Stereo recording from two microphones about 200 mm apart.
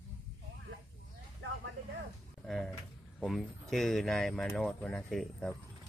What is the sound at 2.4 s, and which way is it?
Speech, centre (ahead or behind).